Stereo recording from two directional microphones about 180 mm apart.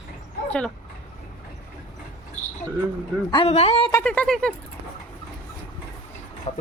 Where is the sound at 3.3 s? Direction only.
35° left (ahead or behind).